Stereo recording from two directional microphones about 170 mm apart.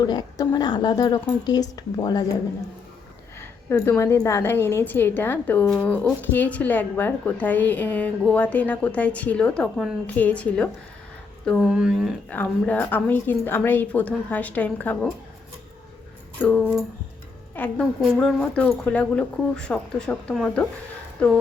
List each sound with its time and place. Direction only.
0.0 s speech: 25° left (ahead or behind)
3.7 s a woman's voice: 15° left (ahead or behind); by 12.1 s 5° right (ahead or behind)
12.3 s a woman's voice: 10° left (ahead or behind)
16.4 s a woman's voice: 10° left (ahead or behind)